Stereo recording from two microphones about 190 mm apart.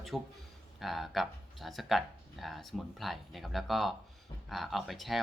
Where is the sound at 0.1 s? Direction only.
Centre (ahead or behind).